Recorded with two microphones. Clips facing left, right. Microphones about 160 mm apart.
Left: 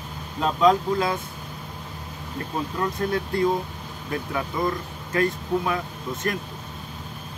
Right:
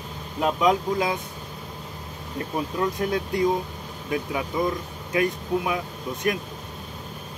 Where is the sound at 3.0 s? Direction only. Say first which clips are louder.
Left 2 dB; 15° right (ahead or behind).